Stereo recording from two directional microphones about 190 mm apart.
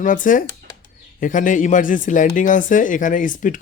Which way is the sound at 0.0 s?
45° left (ahead or behind).